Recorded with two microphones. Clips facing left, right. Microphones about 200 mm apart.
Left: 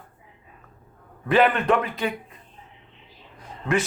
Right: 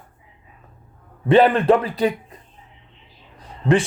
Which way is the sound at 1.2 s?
30° right (ahead or behind).